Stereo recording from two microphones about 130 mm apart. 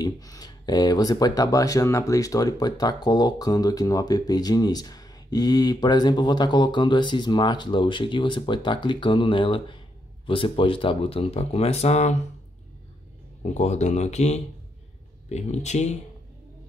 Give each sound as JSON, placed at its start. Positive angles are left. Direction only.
{"t": 0.0, "sound": "speech", "side_deg": 30}
{"t": 13.4, "sound": "speech", "side_deg": 60}